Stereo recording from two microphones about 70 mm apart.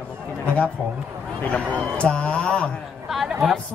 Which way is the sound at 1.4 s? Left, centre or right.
Centre.